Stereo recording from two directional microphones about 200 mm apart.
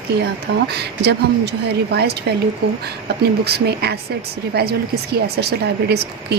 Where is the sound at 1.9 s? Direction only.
55° right (ahead or behind).